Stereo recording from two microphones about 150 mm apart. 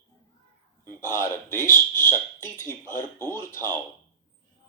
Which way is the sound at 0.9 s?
15° left (ahead or behind).